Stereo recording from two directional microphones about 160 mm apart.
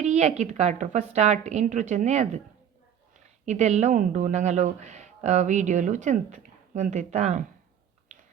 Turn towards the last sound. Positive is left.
turn(degrees=-45)  # may be behind; listen again after turning